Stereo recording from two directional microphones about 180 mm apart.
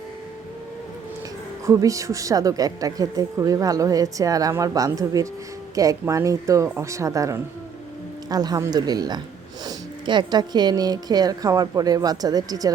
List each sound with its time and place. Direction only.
1.6 s speech: 15° right (ahead or behind)